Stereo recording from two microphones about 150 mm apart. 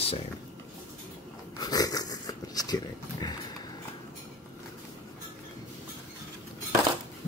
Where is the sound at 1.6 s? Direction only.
25° left (ahead or behind).